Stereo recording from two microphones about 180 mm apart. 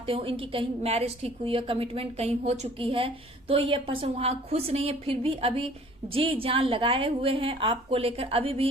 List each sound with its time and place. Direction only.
0.1 s a woman's voice: 30° right (ahead or behind)